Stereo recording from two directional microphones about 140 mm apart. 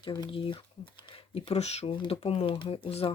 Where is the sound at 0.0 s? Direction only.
30° left (ahead or behind).